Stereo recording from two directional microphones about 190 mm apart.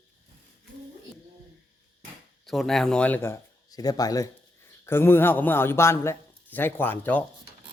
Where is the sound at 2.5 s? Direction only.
Centre (ahead or behind).